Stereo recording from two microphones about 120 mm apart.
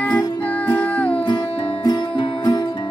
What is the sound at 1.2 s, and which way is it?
Music, 40° left (ahead or behind).